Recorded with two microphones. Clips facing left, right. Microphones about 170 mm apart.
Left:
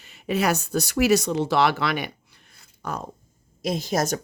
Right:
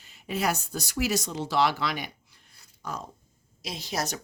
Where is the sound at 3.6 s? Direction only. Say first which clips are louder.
Left 8 dB; 50° left (ahead or behind).